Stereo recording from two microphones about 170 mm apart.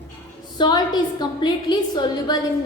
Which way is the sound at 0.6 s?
25° left (ahead or behind).